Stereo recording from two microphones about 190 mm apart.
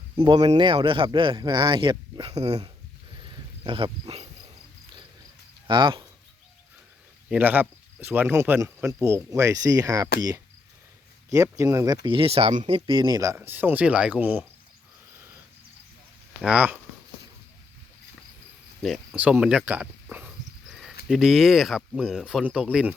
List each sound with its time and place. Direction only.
0.2 s speech: 25° right (ahead or behind)
3.2 s dog: 25° right (ahead or behind)
5.6 s speech: 25° right (ahead or behind)
7.3 s speech: 10° right (ahead or behind)
12.0 s speech: 30° right (ahead or behind); by 14.4 s 10° right (ahead or behind)
16.4 s speech: 5° right (ahead or behind)
18.8 s a sound: 5° right (ahead or behind)
21.1 s speech: centre (ahead or behind)